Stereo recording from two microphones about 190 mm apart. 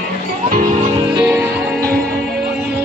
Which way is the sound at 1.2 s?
10° right (ahead or behind).